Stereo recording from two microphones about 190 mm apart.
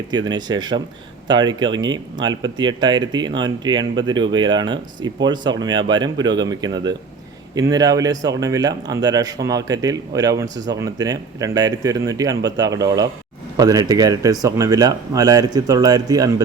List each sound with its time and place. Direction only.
0.1 s speech: 20° right (ahead or behind)